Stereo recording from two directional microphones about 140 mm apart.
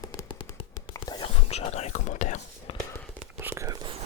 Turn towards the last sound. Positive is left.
turn(degrees=-20)  # may be behind; listen again after turning